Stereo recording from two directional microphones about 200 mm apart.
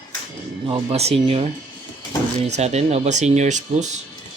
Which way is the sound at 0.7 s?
30° right (ahead or behind).